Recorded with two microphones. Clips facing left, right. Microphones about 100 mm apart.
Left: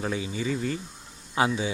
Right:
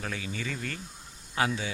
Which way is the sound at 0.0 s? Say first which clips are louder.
Left 6 dB; 20° left (ahead or behind).